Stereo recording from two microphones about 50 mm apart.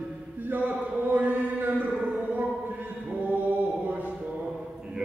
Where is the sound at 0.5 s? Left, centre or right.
Right.